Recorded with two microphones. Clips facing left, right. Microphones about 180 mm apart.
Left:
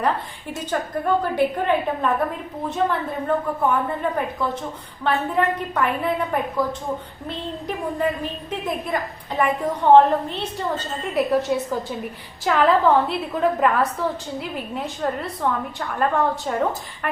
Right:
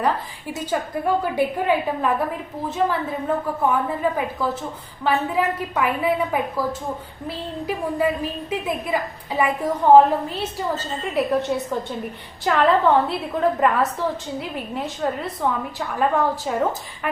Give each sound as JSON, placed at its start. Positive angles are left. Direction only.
{"t": 0.5, "sound": "a woman's voice", "side_deg": -10}
{"t": 7.9, "sound": "a woman's voice", "side_deg": -5}